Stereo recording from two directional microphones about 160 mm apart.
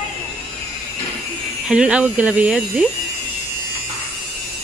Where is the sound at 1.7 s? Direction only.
5° right (ahead or behind).